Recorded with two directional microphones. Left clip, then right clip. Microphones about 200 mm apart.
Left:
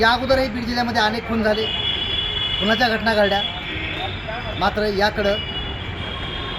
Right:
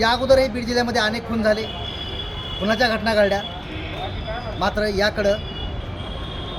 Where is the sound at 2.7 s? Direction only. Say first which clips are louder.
Right 1 dB; 30° right (ahead or behind).